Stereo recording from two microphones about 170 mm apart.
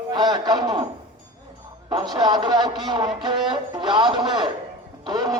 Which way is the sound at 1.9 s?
25° right (ahead or behind).